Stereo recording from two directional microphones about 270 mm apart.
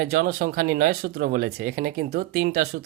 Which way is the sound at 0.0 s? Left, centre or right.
Right.